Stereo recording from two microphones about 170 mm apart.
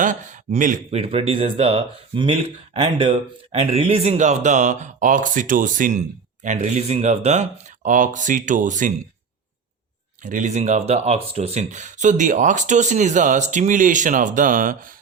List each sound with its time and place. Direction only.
0.0 s speech: 45° right (ahead or behind)
10.2 s speech: 45° right (ahead or behind)